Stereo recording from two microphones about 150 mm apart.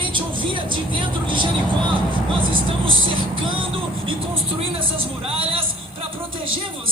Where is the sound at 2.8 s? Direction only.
35° right (ahead or behind).